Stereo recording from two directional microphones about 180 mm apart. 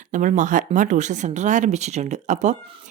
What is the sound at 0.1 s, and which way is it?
Speech, 45° right (ahead or behind).